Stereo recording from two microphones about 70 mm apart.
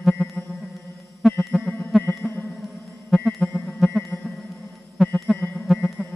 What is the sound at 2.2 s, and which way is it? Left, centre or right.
Music, centre.